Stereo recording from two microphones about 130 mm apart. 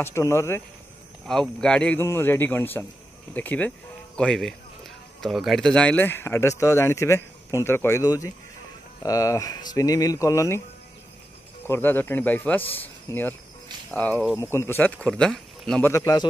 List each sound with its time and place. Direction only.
0.0 s speech: 20° left (ahead or behind)
1.2 s speech: 5° left (ahead or behind)
2.0 s speech: 20° left (ahead or behind)
8.0 s speech: 30° left (ahead or behind)
11.6 s speech: 15° left (ahead or behind)
15.8 s speech: 15° left (ahead or behind)